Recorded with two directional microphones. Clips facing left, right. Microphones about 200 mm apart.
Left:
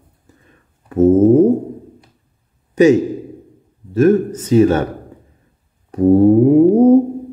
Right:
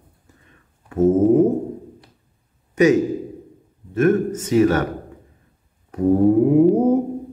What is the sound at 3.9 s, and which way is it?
Speech, 35° left (ahead or behind).